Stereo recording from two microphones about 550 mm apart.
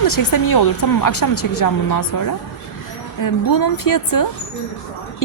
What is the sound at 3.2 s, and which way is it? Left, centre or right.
Speech, left.